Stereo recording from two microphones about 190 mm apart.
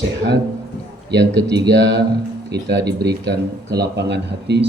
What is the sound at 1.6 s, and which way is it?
Speech, 65° right (ahead or behind).